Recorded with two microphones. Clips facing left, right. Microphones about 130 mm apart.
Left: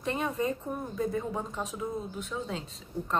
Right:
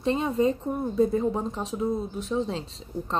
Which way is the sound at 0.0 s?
25° right (ahead or behind).